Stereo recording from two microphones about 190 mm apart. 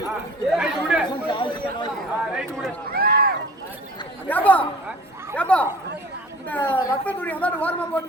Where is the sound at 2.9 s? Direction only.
50° right (ahead or behind).